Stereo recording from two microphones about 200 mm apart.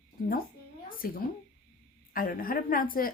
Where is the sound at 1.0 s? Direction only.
45° left (ahead or behind).